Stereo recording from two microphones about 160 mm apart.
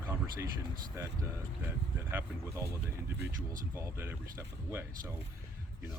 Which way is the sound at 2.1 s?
15° right (ahead or behind).